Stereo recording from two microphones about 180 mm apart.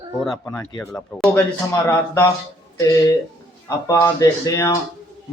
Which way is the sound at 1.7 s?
15° left (ahead or behind).